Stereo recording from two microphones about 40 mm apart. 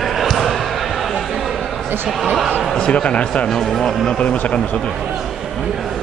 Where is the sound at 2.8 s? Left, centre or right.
Left.